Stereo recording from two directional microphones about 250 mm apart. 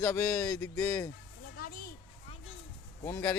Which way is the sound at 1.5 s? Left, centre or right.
Left.